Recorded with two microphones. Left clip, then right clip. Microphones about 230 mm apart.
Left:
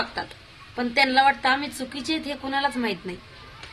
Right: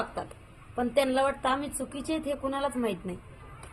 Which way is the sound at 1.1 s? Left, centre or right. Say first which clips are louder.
Left 8 dB; left.